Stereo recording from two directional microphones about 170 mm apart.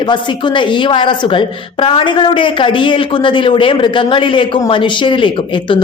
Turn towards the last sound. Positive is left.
turn(degrees=30)  # may be behind; listen again after turning